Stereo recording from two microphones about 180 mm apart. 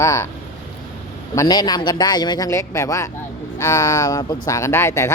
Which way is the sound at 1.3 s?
20° left (ahead or behind).